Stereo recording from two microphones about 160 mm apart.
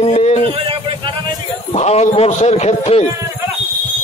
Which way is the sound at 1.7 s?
40° left (ahead or behind).